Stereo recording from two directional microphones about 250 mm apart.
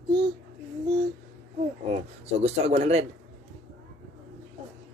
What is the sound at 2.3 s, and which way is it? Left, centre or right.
Speech, right.